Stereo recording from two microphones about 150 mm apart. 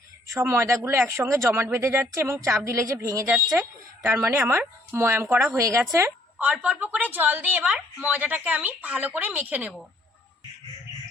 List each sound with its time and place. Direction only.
0.3 s a woman's voice: 20° right (ahead or behind)